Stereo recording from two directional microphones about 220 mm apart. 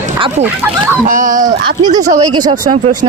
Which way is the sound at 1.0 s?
35° right (ahead or behind).